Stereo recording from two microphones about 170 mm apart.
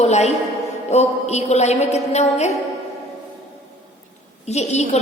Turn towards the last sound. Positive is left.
turn(degrees=40)  # may be behind; listen again after turning